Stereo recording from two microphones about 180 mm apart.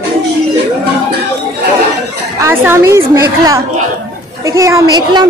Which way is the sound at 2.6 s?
15° right (ahead or behind).